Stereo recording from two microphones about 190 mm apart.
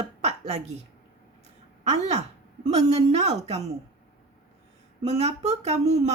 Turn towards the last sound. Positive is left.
turn(degrees=-35)  # may be behind; listen again after turning